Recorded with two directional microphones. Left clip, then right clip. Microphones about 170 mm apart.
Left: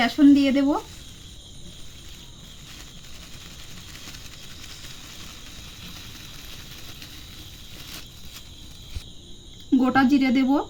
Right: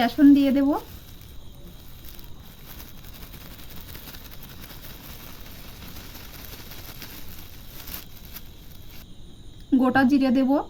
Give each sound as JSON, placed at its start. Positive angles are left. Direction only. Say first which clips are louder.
{"t": 0.0, "sound": "speech", "louder": "even", "side_deg": -5}
{"t": 9.7, "sound": "speech", "louder": "even", "side_deg": -15}